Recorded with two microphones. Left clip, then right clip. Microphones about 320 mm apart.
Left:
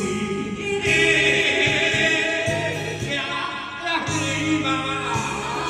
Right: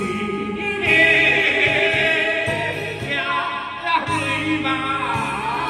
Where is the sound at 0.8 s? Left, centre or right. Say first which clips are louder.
Right 4 dB; centre.